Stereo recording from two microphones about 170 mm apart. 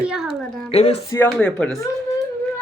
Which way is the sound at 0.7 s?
35° left (ahead or behind).